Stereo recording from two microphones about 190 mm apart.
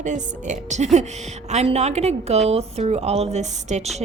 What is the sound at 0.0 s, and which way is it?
A woman's voice, 40° right (ahead or behind).